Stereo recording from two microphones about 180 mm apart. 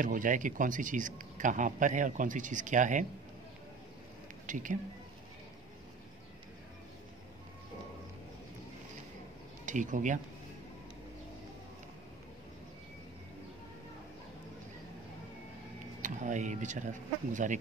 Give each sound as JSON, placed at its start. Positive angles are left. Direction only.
{"t": 0.0, "sound": "speech", "side_deg": -50}
{"t": 4.5, "sound": "speech", "side_deg": -45}
{"t": 9.7, "sound": "speech", "side_deg": -45}
{"t": 16.0, "sound": "speech", "side_deg": -45}